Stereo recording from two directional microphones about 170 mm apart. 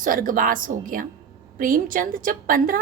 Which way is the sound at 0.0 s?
55° right (ahead or behind).